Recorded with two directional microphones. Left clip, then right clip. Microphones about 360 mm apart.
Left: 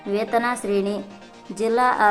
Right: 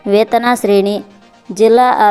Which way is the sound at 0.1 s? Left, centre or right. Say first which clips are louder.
Right 11 dB; centre.